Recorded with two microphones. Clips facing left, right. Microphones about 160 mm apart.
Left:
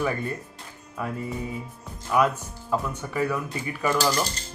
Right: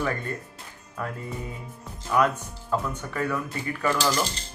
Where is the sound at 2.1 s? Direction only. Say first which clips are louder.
Left 1 dB; 10° left (ahead or behind).